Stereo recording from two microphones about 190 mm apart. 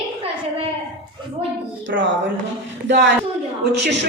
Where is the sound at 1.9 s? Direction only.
75° right (ahead or behind).